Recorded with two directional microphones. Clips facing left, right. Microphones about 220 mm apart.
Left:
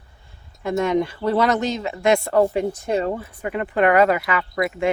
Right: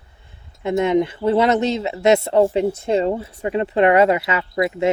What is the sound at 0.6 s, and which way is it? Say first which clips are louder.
Speech: right 3 dB; 20° right (ahead or behind).